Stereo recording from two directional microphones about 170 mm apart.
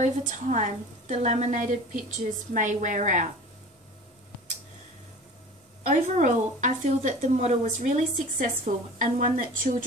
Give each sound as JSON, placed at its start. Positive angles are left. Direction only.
{"t": 0.0, "sound": "a woman's voice", "side_deg": -45}
{"t": 5.9, "sound": "a woman's voice", "side_deg": -45}